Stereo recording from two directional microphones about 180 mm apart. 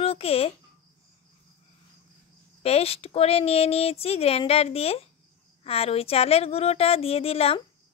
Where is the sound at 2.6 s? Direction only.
35° left (ahead or behind).